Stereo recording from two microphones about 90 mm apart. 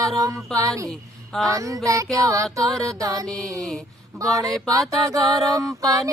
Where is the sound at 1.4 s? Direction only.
35° right (ahead or behind).